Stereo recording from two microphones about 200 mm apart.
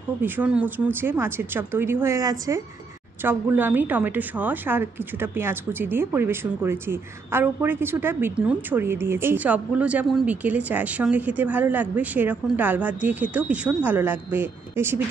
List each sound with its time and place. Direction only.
0.2 s a woman's voice: 10° right (ahead or behind)